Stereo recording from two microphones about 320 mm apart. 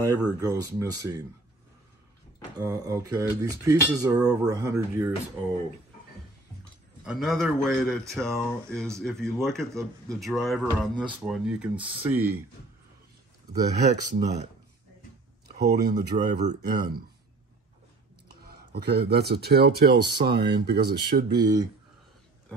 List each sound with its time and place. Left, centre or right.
0.0 s speech: centre
2.5 s speech: centre
7.1 s speech: centre
13.5 s speech: right
15.9 s speech: right
18.4 s speech: right
21.4 s speech: centre